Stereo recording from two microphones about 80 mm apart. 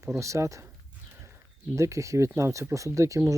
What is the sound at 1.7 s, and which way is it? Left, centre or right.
Speech, right.